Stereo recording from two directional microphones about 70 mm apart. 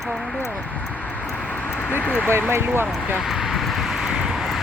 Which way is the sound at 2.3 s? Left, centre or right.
Right.